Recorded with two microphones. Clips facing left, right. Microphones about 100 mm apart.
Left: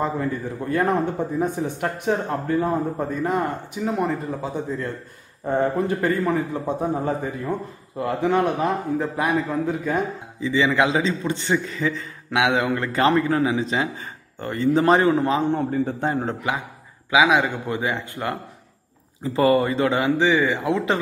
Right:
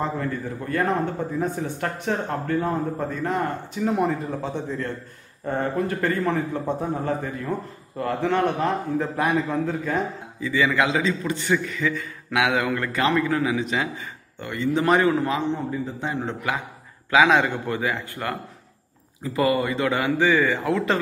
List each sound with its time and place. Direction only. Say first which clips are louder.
0.0 s speech: left 2 dB; 15° left (ahead or behind)
3.9 s a man's voice: even; centre (ahead or behind)
5.4 s speech: left 3 dB; 15° left (ahead or behind)
6.2 s a man's voice: left 1 dB; 5° left (ahead or behind)
10.4 s a man's voice: left 2 dB; 25° left (ahead or behind)
12.9 s a man's voice: left 4 dB; 35° left (ahead or behind)
15.5 s a man's voice: left 5 dB; 60° left (ahead or behind); by 16.3 s 40° left (ahead or behind)
17.1 s a man's voice: even; 10° left (ahead or behind)
19.2 s a man's voice: left 4 dB; 30° left (ahead or behind)